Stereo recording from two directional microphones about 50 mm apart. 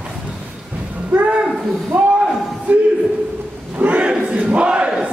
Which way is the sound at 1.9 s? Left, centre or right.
Right.